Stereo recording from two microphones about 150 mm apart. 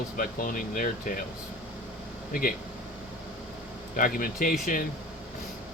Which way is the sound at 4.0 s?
65° left (ahead or behind).